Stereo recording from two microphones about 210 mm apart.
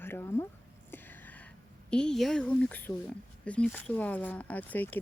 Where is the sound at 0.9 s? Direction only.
10° left (ahead or behind).